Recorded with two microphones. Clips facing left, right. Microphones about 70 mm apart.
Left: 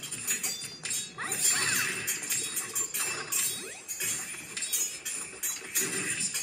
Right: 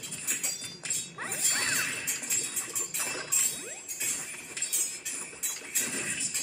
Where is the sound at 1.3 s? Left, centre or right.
Right.